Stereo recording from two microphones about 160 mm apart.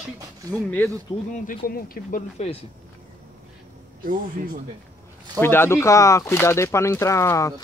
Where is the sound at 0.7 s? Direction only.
10° left (ahead or behind).